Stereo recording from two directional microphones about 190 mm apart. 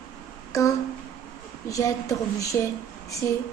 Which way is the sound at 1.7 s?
15° left (ahead or behind).